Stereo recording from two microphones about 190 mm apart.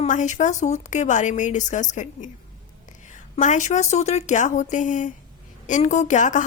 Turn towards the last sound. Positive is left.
turn(degrees=40)  # may be behind; listen again after turning